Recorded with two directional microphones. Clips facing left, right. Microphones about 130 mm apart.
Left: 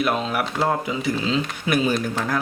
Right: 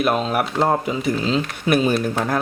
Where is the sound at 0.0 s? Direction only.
50° right (ahead or behind).